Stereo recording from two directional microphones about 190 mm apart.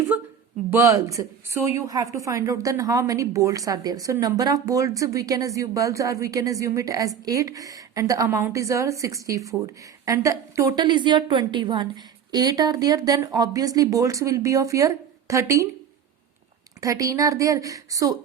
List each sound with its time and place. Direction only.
0.7 s a woman's voice: 15° right (ahead or behind)
16.8 s a woman's voice: 15° right (ahead or behind)